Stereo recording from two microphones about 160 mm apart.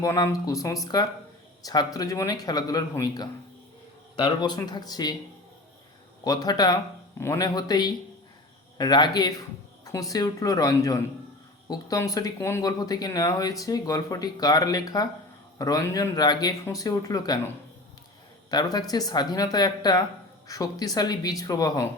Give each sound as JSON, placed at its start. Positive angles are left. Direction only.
{"t": 0.0, "sound": "speech", "side_deg": 20}
{"t": 6.2, "sound": "speech", "side_deg": 25}
{"t": 18.5, "sound": "speech", "side_deg": 25}